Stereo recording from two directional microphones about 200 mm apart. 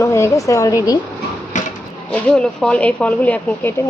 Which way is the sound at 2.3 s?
5° left (ahead or behind).